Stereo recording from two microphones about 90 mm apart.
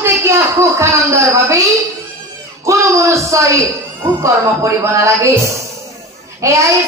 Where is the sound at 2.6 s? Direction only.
35° right (ahead or behind).